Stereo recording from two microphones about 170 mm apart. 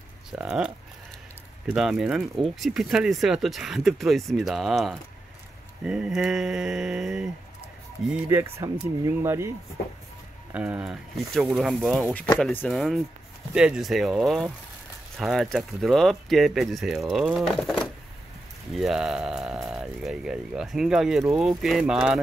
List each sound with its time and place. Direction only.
0.3 s speech: 5° right (ahead or behind)
8.1 s speech: 15° right (ahead or behind)
10.5 s speech: 10° right (ahead or behind)